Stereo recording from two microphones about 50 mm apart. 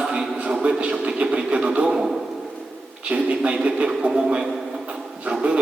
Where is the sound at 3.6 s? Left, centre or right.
Centre.